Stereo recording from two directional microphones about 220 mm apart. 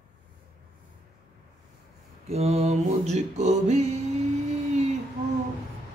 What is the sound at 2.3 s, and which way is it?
Mantra, 30° right (ahead or behind).